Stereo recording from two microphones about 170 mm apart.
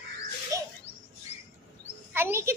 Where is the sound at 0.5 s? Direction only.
20° right (ahead or behind).